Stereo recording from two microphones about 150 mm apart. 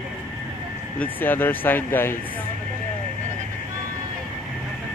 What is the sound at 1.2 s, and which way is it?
Speech, 15° left (ahead or behind).